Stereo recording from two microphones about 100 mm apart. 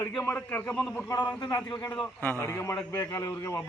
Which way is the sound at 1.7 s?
40° left (ahead or behind).